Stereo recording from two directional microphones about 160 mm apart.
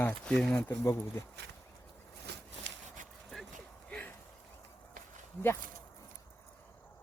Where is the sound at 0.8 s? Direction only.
20° left (ahead or behind).